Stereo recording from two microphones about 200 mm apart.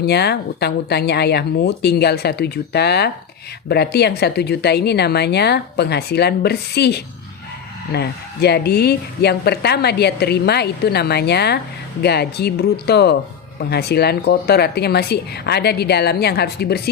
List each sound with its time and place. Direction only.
0.0 s a woman's voice: 55° left (ahead or behind)